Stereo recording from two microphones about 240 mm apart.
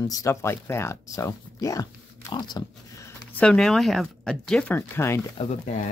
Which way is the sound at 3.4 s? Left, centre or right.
Centre.